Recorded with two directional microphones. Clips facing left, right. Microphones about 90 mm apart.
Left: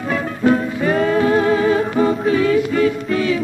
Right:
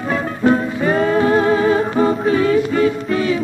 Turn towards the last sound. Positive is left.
turn(degrees=-30)  # may be behind; listen again after turning